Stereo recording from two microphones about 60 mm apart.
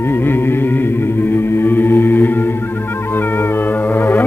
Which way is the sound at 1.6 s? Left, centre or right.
Left.